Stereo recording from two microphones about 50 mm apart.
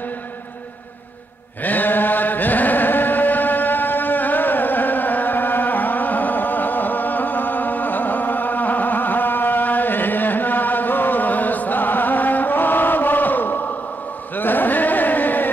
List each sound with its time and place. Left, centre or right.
1.6 s chant: left